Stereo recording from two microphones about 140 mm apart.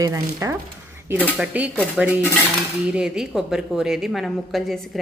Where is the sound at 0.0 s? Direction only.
20° right (ahead or behind).